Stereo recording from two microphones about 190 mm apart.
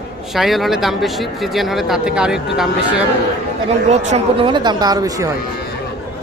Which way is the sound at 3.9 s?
35° right (ahead or behind).